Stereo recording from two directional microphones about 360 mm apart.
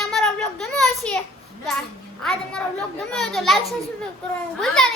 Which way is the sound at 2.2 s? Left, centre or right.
Centre.